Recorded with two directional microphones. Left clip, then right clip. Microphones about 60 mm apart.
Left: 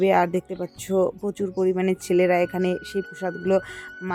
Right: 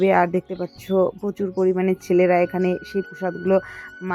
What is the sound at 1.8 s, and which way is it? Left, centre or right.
Speech, centre.